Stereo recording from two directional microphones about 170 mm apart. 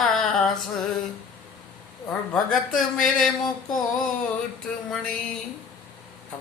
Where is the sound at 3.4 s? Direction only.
25° left (ahead or behind).